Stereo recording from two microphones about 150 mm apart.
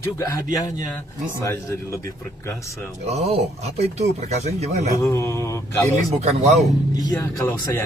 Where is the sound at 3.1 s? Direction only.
45° right (ahead or behind).